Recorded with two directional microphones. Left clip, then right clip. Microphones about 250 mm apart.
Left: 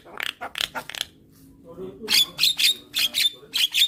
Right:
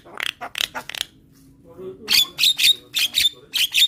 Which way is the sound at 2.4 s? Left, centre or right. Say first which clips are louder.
Right 4 dB; centre.